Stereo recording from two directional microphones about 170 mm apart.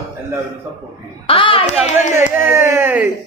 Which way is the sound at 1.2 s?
30° left (ahead or behind).